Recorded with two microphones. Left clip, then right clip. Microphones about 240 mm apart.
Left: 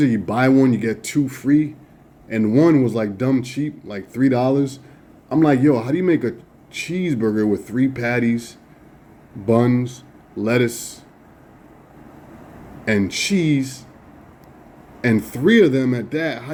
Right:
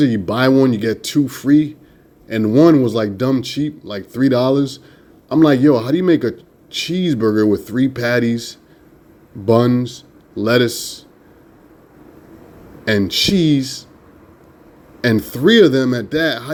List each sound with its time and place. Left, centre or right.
0.0 s a man's voice: centre
12.8 s a man's voice: centre
15.0 s speech: centre